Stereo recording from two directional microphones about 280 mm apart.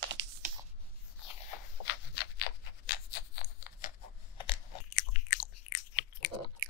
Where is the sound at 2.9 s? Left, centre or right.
Left.